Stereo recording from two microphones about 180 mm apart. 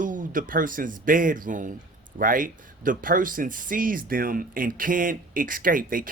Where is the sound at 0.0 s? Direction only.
45° right (ahead or behind).